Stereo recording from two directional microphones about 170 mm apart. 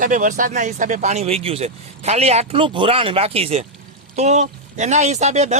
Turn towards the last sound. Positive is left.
turn(degrees=-40)  # may be behind; listen again after turning